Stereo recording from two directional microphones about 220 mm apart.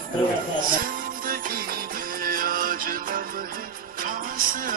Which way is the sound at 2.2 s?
40° right (ahead or behind).